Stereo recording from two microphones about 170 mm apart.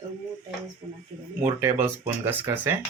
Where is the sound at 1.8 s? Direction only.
15° right (ahead or behind).